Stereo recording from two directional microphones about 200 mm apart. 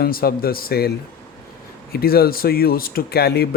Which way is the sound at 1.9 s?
50° left (ahead or behind).